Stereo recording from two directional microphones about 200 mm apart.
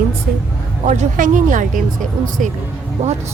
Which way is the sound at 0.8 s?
35° right (ahead or behind).